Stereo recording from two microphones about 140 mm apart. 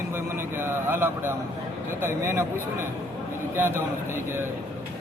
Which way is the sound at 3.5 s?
15° right (ahead or behind).